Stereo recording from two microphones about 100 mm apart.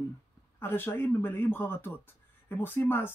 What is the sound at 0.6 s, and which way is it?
Speech, 20° left (ahead or behind).